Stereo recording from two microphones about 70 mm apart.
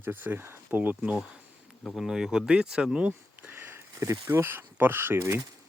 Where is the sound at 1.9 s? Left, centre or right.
Centre.